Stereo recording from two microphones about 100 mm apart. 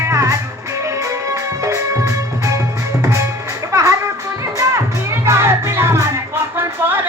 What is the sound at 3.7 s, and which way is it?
Music, 35° right (ahead or behind).